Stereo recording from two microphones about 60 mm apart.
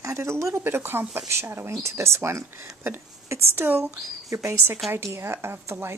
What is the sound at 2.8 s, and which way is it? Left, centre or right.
Speech, right.